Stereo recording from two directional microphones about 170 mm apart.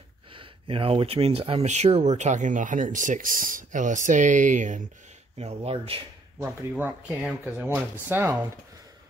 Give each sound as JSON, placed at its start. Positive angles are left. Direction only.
{"t": 0.3, "sound": "speech", "side_deg": -30}
{"t": 6.4, "sound": "speech", "side_deg": -10}